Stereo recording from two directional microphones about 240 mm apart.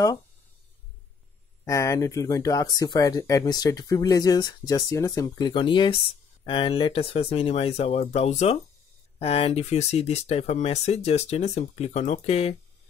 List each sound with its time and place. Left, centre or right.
1.6 s speech: centre